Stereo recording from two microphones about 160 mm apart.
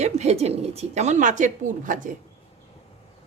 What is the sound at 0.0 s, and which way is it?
A woman's voice, 45° right (ahead or behind).